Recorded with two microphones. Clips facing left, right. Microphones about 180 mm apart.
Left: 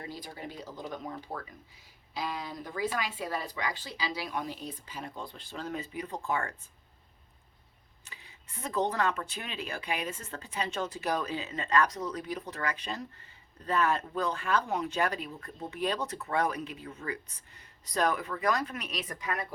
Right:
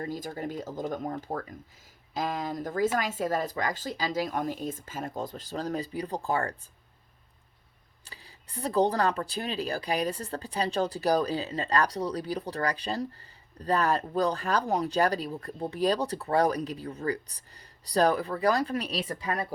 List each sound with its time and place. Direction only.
0.0 s speech: 45° right (ahead or behind)
8.0 s speech: 35° right (ahead or behind)